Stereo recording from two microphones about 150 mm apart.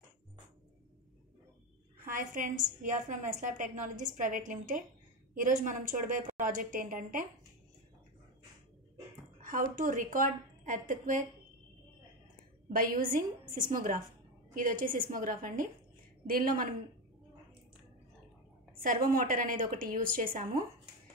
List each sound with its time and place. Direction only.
2.0 s a woman's voice: 70° right (ahead or behind)
9.4 s a woman's voice: 65° right (ahead or behind)
12.6 s a woman's voice: 70° right (ahead or behind)
18.8 s a woman's voice: 65° right (ahead or behind)